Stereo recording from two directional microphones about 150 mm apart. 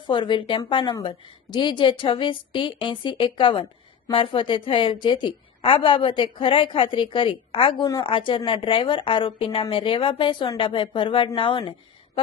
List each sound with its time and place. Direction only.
0.1 s a woman's voice: 35° left (ahead or behind)